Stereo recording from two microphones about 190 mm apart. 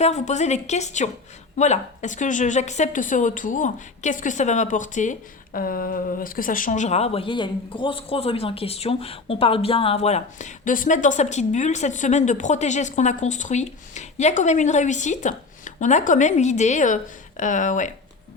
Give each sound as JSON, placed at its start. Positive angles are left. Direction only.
{"t": 0.0, "sound": "a woman's voice", "side_deg": 35}